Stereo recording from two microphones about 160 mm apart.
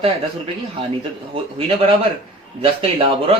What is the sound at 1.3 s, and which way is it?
A man's voice, 35° right (ahead or behind).